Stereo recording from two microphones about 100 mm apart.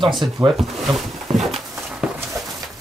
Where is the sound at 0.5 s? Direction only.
Centre (ahead or behind).